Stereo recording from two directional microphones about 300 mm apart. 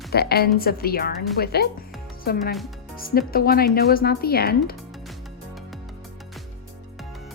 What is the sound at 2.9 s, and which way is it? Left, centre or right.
Speech, left.